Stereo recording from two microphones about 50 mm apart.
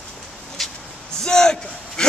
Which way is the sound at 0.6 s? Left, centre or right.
Centre.